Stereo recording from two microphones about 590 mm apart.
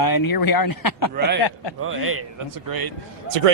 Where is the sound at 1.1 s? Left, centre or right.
Centre.